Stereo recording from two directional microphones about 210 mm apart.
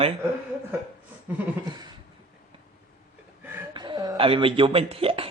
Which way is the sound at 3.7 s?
20° right (ahead or behind).